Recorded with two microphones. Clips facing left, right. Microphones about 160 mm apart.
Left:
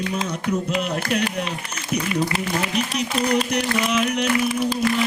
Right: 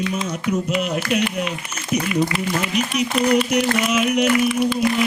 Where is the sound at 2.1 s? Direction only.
35° left (ahead or behind).